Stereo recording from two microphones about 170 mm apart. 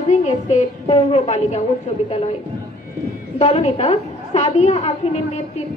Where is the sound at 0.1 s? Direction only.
45° left (ahead or behind).